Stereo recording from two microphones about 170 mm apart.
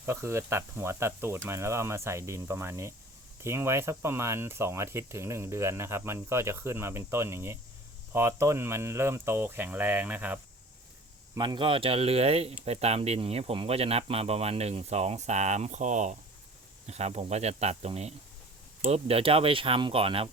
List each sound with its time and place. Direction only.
0.0 s speech: 15° right (ahead or behind)
11.3 s speech: 25° right (ahead or behind)